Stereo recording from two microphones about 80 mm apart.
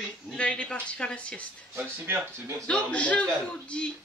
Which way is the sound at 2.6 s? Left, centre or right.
Centre.